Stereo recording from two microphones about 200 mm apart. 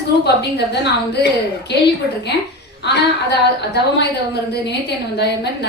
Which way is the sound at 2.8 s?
55° left (ahead or behind).